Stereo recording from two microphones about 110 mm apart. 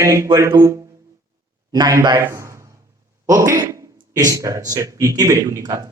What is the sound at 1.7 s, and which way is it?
Speech, 35° right (ahead or behind).